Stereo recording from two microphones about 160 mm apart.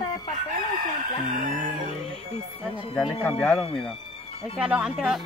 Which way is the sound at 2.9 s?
5° left (ahead or behind).